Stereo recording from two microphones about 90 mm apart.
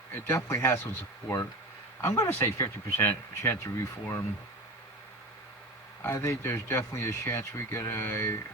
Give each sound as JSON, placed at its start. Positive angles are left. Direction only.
{"t": 0.1, "sound": "speech", "side_deg": 30}
{"t": 6.0, "sound": "speech", "side_deg": 30}